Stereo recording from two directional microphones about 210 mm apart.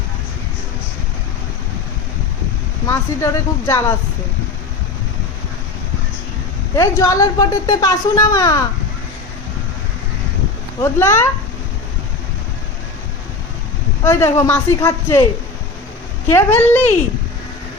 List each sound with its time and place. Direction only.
2.8 s speech: 15° left (ahead or behind)
6.7 s speech: 15° left (ahead or behind)
10.8 s speech: 10° left (ahead or behind)
14.0 s speech: 10° left (ahead or behind)
16.3 s speech: 10° left (ahead or behind)